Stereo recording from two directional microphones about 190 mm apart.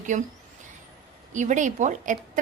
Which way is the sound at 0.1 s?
40° right (ahead or behind).